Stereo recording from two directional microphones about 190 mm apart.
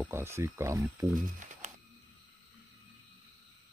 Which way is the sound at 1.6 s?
40° right (ahead or behind).